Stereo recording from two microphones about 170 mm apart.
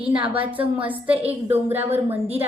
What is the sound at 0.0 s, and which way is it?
A woman's voice, 10° right (ahead or behind).